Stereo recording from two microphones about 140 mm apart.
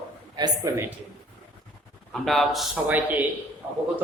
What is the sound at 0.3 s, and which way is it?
Speech, 30° right (ahead or behind).